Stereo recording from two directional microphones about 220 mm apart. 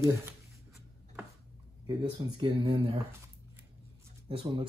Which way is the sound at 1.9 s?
20° right (ahead or behind).